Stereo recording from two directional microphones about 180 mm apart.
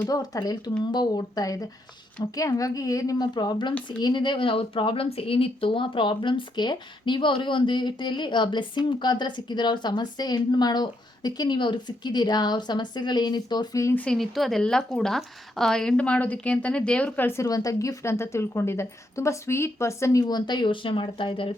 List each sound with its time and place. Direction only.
0.0 s speech: 20° left (ahead or behind)
14.0 s a woman's voice: 5° left (ahead or behind); by 21.5 s 30° left (ahead or behind)